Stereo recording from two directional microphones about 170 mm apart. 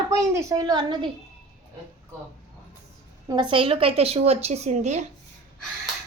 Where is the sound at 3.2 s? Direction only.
25° right (ahead or behind); by 5.0 s 45° right (ahead or behind).